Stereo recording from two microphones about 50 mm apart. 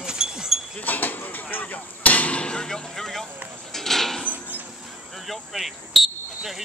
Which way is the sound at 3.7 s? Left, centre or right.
Centre.